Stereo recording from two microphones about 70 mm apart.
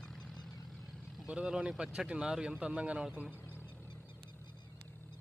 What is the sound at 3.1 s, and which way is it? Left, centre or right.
Speech, right.